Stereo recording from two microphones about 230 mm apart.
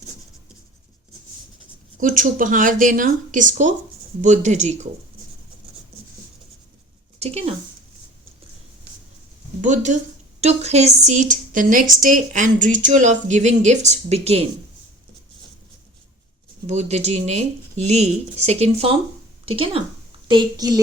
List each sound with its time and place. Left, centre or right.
2.0 s a woman's voice: right
7.2 s speech: right
9.6 s a woman's voice: right
16.6 s a woman's voice: right